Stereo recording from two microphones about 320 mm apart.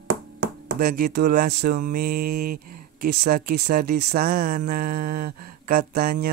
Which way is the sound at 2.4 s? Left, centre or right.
Right.